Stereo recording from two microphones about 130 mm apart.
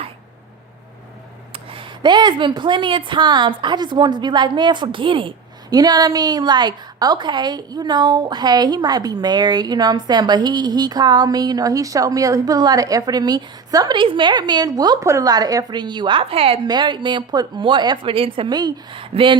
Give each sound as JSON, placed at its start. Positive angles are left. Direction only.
{"t": 1.5, "sound": "a woman's voice", "side_deg": -40}
{"t": 5.7, "sound": "a woman's voice", "side_deg": -30}
{"t": 16.6, "sound": "a woman's voice", "side_deg": -35}
{"t": 18.5, "sound": "a woman's voice", "side_deg": -30}